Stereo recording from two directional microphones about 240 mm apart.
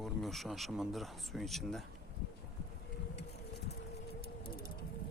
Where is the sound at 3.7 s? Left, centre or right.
Left.